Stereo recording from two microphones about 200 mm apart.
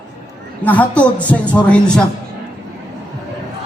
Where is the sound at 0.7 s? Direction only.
5° left (ahead or behind).